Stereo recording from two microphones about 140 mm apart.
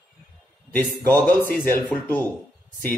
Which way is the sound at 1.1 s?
15° left (ahead or behind).